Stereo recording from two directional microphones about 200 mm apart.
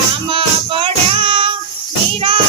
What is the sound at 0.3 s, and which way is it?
Music, 25° right (ahead or behind).